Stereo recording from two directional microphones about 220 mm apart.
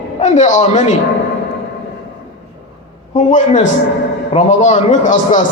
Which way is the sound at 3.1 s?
35° left (ahead or behind).